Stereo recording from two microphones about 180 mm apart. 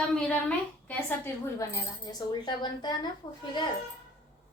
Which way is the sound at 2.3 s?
25° left (ahead or behind).